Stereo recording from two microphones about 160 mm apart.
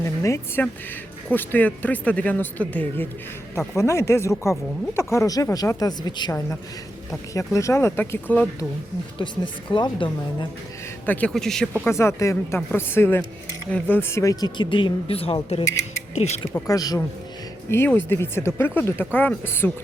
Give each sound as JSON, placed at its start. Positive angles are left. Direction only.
{"t": 0.0, "sound": "speech", "side_deg": 20}
{"t": 9.1, "sound": "speech", "side_deg": 30}
{"t": 11.0, "sound": "a man's voice", "side_deg": 10}
{"t": 11.8, "sound": "speech", "side_deg": 15}
{"t": 16.6, "sound": "speech", "side_deg": 20}